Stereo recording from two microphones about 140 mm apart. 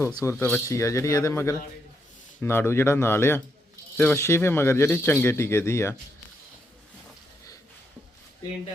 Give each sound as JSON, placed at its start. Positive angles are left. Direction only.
{"t": 0.1, "sound": "speech", "side_deg": 20}